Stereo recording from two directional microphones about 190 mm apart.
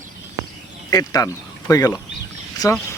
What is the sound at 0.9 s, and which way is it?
Speech, 20° left (ahead or behind).